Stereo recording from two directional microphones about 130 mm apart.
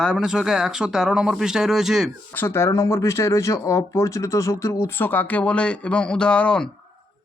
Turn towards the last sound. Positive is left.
turn(degrees=5)  # may be behind; listen again after turning